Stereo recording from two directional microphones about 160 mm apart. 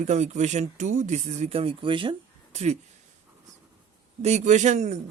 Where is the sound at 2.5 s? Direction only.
45° right (ahead or behind).